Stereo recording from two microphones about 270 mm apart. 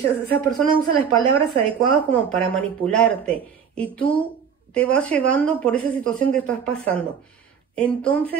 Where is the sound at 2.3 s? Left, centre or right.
Centre.